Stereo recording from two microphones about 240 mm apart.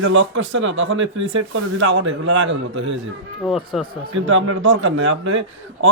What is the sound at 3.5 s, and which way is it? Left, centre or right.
Speech, centre.